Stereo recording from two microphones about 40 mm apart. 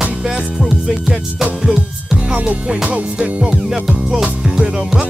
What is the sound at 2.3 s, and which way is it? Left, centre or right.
Music, right.